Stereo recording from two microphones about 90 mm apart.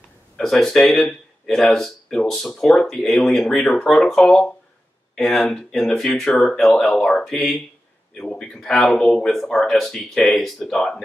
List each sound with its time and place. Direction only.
0.4 s speech: 5° left (ahead or behind)
8.1 s speech: 15° left (ahead or behind)